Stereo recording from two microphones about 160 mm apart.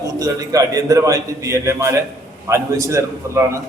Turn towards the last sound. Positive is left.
turn(degrees=-20)  # may be behind; listen again after turning